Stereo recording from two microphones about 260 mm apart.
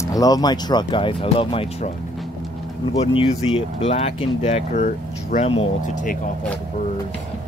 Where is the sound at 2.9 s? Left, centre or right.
Left.